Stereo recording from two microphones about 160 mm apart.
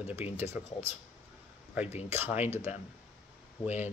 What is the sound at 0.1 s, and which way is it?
Speech, 15° right (ahead or behind).